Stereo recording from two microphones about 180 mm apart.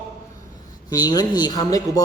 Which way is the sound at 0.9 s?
20° left (ahead or behind).